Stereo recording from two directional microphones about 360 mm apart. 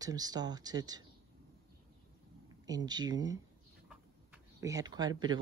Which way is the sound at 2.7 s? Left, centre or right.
Centre.